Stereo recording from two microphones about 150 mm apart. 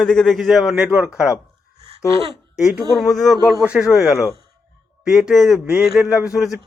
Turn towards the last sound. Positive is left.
turn(degrees=-5)  # may be behind; listen again after turning